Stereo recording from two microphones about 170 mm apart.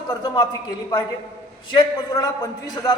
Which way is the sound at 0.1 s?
20° left (ahead or behind).